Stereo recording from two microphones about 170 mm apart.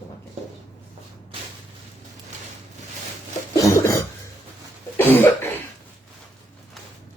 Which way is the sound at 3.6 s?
15° left (ahead or behind).